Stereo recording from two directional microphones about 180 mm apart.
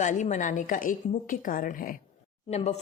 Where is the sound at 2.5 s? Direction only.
35° left (ahead or behind).